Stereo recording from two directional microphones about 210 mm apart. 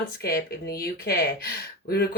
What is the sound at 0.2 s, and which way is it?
Speech, 45° left (ahead or behind).